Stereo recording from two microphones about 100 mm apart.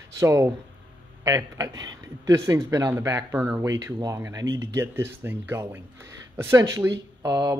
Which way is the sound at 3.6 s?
30° right (ahead or behind).